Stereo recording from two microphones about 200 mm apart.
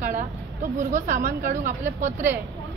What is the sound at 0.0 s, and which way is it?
Speech, 40° right (ahead or behind).